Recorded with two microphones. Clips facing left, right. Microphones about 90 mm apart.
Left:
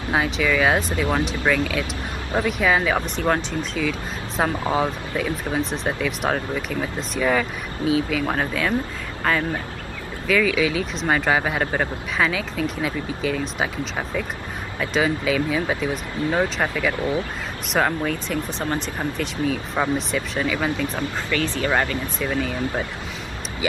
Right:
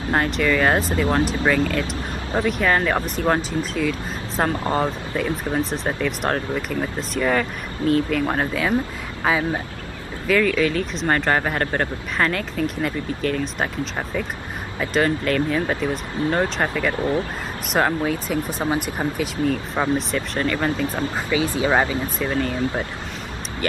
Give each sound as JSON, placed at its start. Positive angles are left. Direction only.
{"t": 0.1, "sound": "speech", "side_deg": 0}
{"t": 20.9, "sound": "speech", "side_deg": -10}